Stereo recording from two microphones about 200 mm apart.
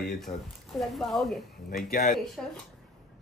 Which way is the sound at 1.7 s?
50° left (ahead or behind).